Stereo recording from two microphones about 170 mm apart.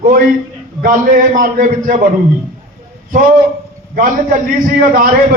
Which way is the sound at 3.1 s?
55° right (ahead or behind).